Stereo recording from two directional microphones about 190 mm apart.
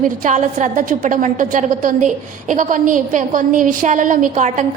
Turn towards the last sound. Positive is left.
turn(degrees=-40)  # may be behind; listen again after turning